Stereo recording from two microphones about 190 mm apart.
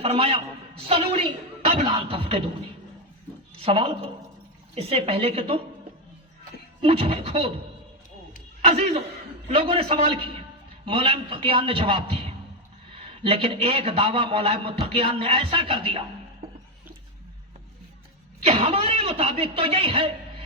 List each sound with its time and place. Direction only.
0.0 s a man's voice: 30° right (ahead or behind)
3.6 s a man's voice: 30° right (ahead or behind)
6.8 s a man's voice: 30° right (ahead or behind)
8.6 s a man's voice: 35° right (ahead or behind)
18.4 s a man's voice: 30° right (ahead or behind)